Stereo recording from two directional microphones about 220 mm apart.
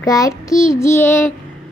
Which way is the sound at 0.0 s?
15° left (ahead or behind).